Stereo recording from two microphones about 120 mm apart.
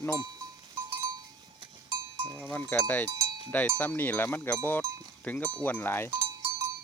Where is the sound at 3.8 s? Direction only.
15° left (ahead or behind).